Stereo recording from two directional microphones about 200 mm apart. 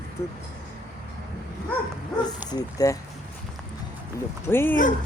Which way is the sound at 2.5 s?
20° left (ahead or behind).